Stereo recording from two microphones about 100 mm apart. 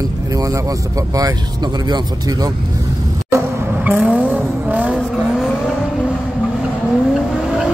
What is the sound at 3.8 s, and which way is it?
Vehicle, 10° right (ahead or behind).